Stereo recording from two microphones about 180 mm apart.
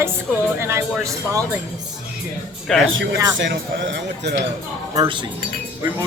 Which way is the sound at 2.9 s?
80° right.